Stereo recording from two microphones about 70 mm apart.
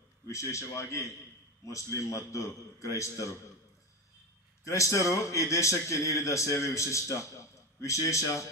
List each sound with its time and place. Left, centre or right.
0.3 s a man's voice: left
4.6 s a man's voice: left